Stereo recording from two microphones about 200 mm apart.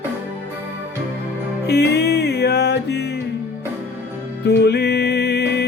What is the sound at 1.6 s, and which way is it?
Music, 55° left (ahead or behind).